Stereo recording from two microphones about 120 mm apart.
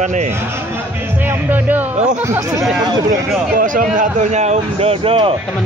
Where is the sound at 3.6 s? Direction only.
80° right; by 5.4 s 50° right (ahead or behind).